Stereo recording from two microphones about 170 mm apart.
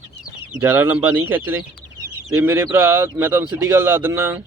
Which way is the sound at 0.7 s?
10° right (ahead or behind).